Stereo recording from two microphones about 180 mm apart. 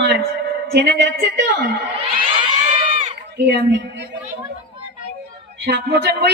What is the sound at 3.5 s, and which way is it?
Speech, 70° right (ahead or behind).